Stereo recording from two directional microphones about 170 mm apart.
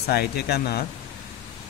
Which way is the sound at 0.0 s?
70° left (ahead or behind).